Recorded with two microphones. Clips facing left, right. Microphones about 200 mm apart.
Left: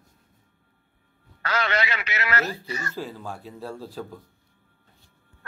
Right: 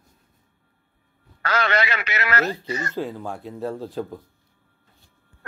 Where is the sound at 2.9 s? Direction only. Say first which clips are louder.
Right 5 dB; 20° right (ahead or behind).